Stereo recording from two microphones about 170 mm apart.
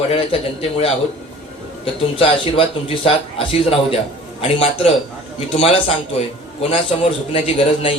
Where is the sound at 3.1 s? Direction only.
35° left (ahead or behind).